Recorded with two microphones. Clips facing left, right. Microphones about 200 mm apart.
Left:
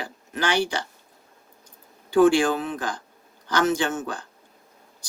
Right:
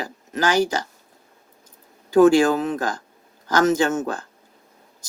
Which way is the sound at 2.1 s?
40° right (ahead or behind).